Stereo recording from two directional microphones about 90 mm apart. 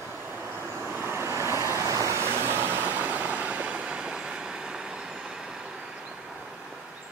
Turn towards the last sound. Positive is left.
turn(degrees=-5)  # may be behind; listen again after turning